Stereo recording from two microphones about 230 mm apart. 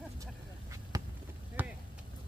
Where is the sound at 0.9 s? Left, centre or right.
Centre.